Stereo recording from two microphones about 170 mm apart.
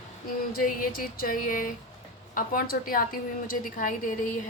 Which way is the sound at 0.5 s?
55° left (ahead or behind).